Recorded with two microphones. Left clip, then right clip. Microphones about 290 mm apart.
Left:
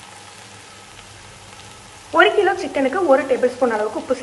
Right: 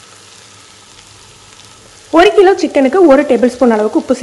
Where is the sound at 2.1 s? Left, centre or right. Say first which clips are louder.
Right 8 dB; right.